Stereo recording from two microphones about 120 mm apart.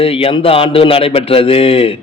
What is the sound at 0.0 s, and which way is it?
A man's voice, 50° left (ahead or behind).